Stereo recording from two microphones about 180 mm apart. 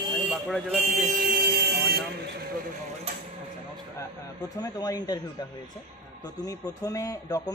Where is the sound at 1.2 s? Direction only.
55° right (ahead or behind).